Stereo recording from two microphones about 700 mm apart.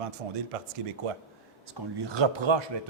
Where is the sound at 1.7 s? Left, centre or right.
Right.